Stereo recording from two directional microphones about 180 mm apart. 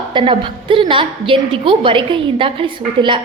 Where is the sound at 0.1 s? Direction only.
25° right (ahead or behind).